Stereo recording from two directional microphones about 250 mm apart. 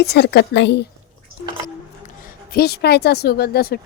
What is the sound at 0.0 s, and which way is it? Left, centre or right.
Speech, left.